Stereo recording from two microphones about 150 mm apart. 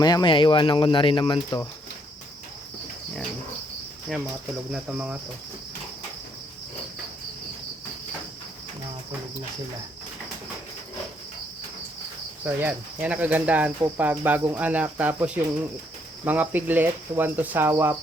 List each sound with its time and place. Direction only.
0.0 s speech: 30° left (ahead or behind)
4.7 s speech: 10° right (ahead or behind)
12.5 s speech: 15° right (ahead or behind)